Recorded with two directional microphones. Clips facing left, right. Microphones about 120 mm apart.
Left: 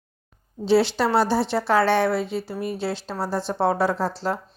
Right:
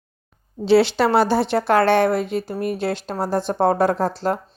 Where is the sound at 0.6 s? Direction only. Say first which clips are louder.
Right 4 dB; 70° right (ahead or behind).